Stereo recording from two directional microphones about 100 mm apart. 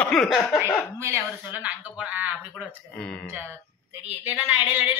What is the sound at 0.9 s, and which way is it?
Speech, 25° right (ahead or behind).